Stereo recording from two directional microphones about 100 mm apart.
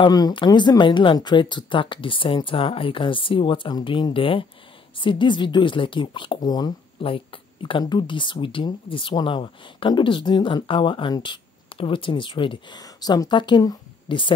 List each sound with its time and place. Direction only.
0.1 s speech: 50° left (ahead or behind)
7.0 s speech: 65° left (ahead or behind)
7.8 s speech: 50° left (ahead or behind)
14.0 s speech: 55° left (ahead or behind)